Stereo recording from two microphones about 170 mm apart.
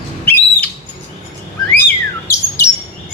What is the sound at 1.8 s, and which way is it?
Bird, 15° left (ahead or behind).